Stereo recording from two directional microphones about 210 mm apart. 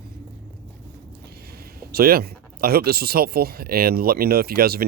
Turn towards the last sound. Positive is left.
turn(degrees=-45)  # may be behind; listen again after turning